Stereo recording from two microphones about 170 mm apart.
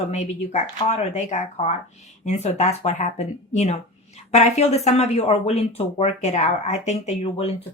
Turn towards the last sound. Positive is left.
turn(degrees=40)  # may be behind; listen again after turning